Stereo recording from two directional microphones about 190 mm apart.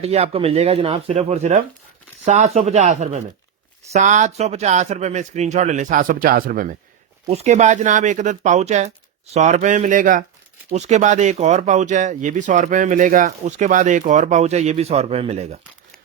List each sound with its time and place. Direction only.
0.0 s speech: 35° right (ahead or behind); by 6.7 s 50° right (ahead or behind)
7.3 s speech: 35° right (ahead or behind)